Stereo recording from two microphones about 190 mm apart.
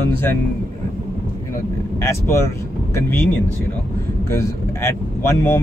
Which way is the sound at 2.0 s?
15° left (ahead or behind).